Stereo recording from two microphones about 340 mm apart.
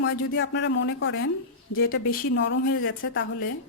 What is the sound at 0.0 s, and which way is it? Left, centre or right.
A woman's voice, left.